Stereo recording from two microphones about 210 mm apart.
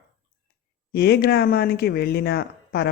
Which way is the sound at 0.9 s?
50° left (ahead or behind).